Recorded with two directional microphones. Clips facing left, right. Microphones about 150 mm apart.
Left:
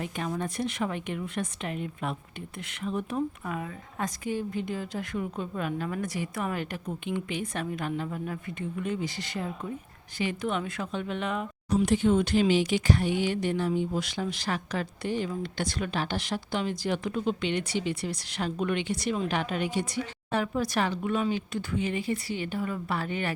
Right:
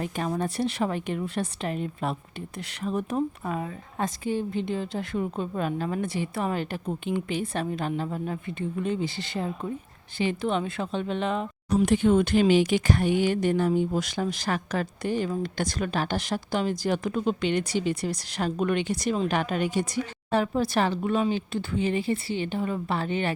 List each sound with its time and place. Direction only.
0.0 s a woman's voice: 40° right (ahead or behind)
11.8 s speech: 55° right (ahead or behind); by 23.3 s 25° right (ahead or behind)